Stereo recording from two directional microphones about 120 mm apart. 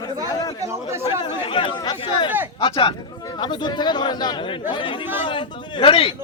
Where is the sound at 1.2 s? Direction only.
40° left (ahead or behind).